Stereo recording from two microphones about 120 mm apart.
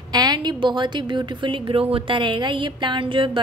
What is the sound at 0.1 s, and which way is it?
A woman's voice, 35° right (ahead or behind).